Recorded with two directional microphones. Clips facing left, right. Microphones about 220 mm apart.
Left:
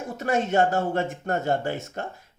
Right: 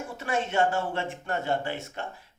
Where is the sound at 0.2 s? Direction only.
40° left (ahead or behind).